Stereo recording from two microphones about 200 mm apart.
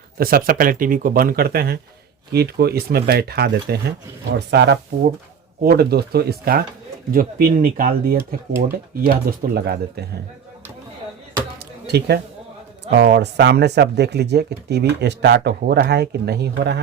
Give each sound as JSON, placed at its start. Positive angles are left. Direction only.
{"t": 0.2, "sound": "speech", "side_deg": -45}
{"t": 11.6, "sound": "a sound", "side_deg": -55}
{"t": 12.9, "sound": "speech", "side_deg": -55}